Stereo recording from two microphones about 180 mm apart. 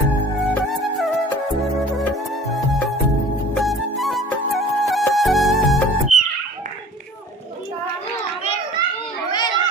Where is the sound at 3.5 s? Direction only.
Centre (ahead or behind).